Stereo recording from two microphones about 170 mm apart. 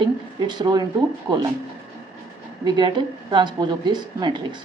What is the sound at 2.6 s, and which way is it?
Speech, 25° right (ahead or behind).